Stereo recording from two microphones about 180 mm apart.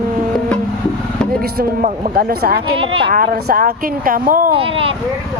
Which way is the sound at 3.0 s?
50° right (ahead or behind).